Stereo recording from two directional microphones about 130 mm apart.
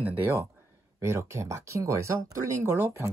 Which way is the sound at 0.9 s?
20° right (ahead or behind).